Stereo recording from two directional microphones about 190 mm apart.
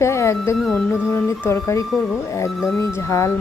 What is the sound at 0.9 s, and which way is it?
A woman's voice, 10° left (ahead or behind).